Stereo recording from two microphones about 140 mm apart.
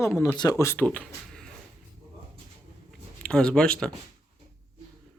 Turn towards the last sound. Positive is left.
turn(degrees=5)  # may be behind; listen again after turning